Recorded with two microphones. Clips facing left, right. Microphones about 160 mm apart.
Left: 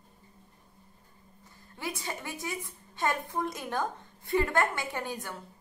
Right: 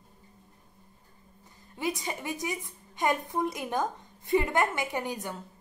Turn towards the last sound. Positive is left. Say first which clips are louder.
# right 3 dB
turn(degrees=-15)  # may be behind; listen again after turning